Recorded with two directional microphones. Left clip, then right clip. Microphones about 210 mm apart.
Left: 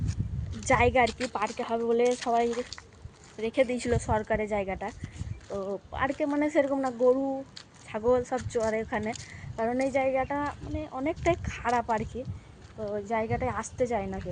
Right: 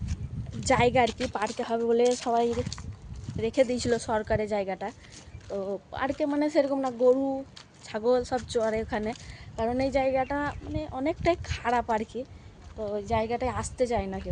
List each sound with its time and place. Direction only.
0.7 s speech: 15° right (ahead or behind)